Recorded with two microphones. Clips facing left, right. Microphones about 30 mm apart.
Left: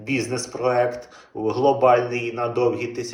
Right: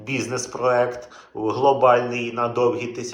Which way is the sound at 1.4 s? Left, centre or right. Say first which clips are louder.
Right 1 dB; centre.